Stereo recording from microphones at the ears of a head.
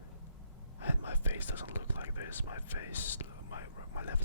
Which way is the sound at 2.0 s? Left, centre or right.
Left.